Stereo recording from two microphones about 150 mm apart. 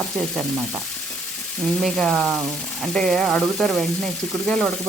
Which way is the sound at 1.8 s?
Centre (ahead or behind).